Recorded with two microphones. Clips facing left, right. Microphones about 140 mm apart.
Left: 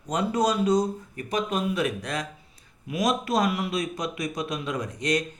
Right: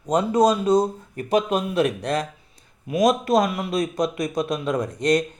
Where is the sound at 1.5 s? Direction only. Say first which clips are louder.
Right 5 dB; 65° right (ahead or behind).